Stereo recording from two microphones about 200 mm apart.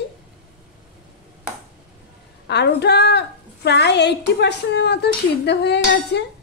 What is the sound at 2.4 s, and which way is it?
A woman's voice, 55° left (ahead or behind).